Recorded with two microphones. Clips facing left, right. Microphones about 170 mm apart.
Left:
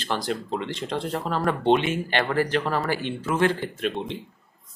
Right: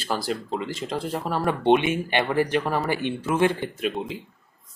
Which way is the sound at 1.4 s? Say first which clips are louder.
Right 2 dB; 15° right (ahead or behind).